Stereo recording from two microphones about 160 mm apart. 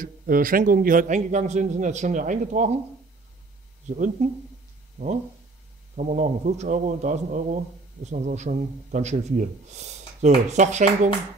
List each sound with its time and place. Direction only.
0.0 s a man's voice: 60° right (ahead or behind)
3.9 s a man's voice: 50° right (ahead or behind)
5.9 s a man's voice: 50° right (ahead or behind)